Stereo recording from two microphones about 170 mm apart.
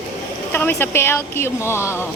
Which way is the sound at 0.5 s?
10° left (ahead or behind).